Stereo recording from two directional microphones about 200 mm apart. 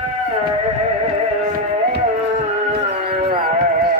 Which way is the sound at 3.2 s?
50° right (ahead or behind).